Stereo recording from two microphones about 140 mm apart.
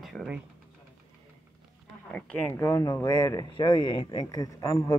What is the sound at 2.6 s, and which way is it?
Speech, 25° left (ahead or behind).